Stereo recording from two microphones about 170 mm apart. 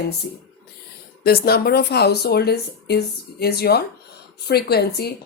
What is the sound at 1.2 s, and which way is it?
A woman's voice, 65° left (ahead or behind).